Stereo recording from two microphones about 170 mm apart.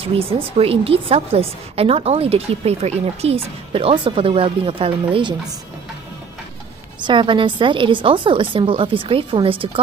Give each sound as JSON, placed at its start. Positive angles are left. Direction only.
{"t": 0.0, "sound": "a woman's voice", "side_deg": -35}
{"t": 7.0, "sound": "speech", "side_deg": -30}